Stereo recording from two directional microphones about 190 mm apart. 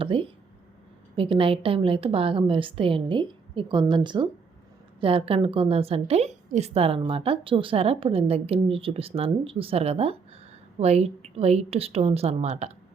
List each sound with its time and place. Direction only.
0.0 s a woman's voice: 30° right (ahead or behind)